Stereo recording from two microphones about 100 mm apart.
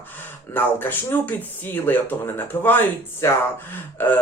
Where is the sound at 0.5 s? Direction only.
20° left (ahead or behind).